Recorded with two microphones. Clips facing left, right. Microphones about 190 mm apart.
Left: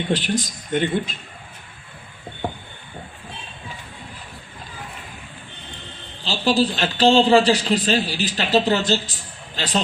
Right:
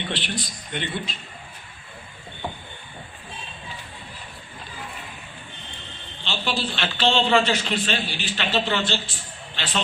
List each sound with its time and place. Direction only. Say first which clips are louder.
0.1 s speech: left 8 dB; 45° left (ahead or behind)
6.2 s a man's voice: left 8 dB; 35° left (ahead or behind)